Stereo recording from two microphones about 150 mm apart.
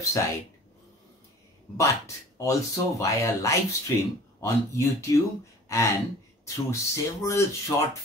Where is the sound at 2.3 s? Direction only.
20° left (ahead or behind).